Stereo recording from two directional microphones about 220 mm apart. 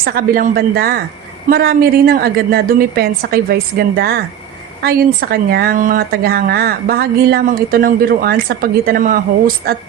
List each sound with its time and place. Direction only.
0.0 s speech: 45° right (ahead or behind)